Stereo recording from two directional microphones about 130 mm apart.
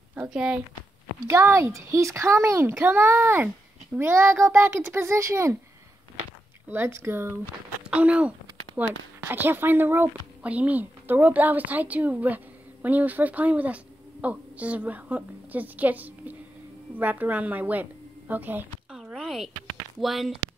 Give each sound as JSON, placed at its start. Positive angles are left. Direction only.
{"t": 0.1, "sound": "a woman's voice", "side_deg": -10}
{"t": 1.2, "sound": "a child's voice", "side_deg": -20}
{"t": 6.7, "sound": "a child's voice", "side_deg": -20}
{"t": 18.9, "sound": "a sound", "side_deg": 0}
{"t": 20.0, "sound": "speech", "side_deg": 0}